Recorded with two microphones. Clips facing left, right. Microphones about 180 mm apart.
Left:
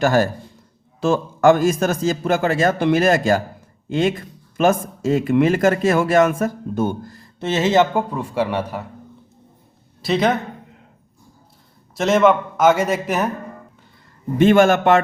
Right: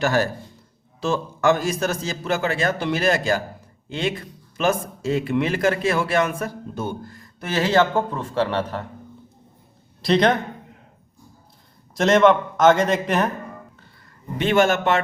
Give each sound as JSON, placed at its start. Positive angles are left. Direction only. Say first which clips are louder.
{"t": 0.0, "sound": "speech", "louder": "left 4 dB", "side_deg": 45}
{"t": 7.2, "sound": "a man's voice", "louder": "left 3 dB", "side_deg": 25}
{"t": 10.0, "sound": "speech", "louder": "even", "side_deg": 5}
{"t": 11.9, "sound": "a man's voice", "louder": "even", "side_deg": 0}
{"t": 14.3, "sound": "speech", "louder": "left 5 dB", "side_deg": 50}